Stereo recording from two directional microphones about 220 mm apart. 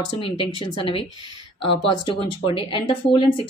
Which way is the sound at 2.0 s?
25° left (ahead or behind).